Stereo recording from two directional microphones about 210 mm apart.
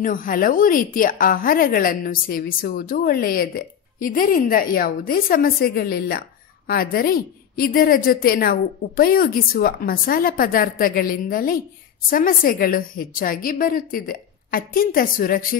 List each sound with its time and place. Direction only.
0.0 s a woman's voice: 40° left (ahead or behind)